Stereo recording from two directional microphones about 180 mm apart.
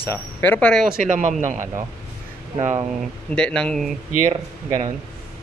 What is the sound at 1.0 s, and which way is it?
Speech, 45° right (ahead or behind).